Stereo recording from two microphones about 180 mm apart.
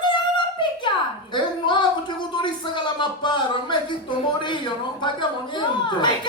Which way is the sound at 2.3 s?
25° left (ahead or behind).